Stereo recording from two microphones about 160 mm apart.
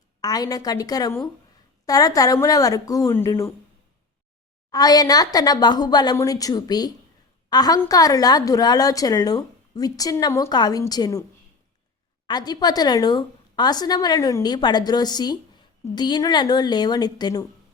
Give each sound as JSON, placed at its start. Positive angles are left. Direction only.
{"t": 0.2, "sound": "a woman's voice", "side_deg": 25}
{"t": 4.7, "sound": "a woman's voice", "side_deg": 25}
{"t": 12.3, "sound": "a woman's voice", "side_deg": 25}